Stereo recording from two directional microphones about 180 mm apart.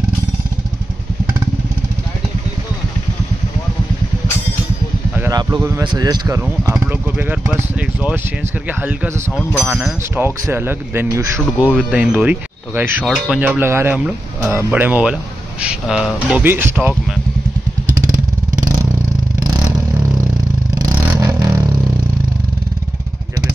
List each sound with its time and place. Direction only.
5.3 s speech: 25° right (ahead or behind)
9.4 s speech: centre (ahead or behind); by 11.7 s 15° right (ahead or behind)
11.7 s speech: 5° right (ahead or behind)
13.0 s speech: centre (ahead or behind)
13.4 s speech: 10° right (ahead or behind)
20.7 s vehicle: 20° right (ahead or behind)